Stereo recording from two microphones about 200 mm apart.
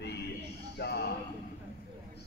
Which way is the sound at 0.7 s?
55° left (ahead or behind).